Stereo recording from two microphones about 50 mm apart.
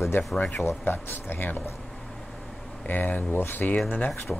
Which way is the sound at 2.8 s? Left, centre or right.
Left.